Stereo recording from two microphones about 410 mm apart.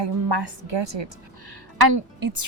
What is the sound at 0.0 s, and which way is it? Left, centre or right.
A woman's voice, right.